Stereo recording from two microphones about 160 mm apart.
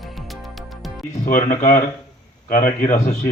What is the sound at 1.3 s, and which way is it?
A man's voice, 50° left (ahead or behind).